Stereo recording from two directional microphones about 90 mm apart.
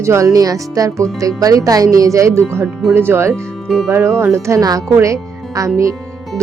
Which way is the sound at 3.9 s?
30° right (ahead or behind).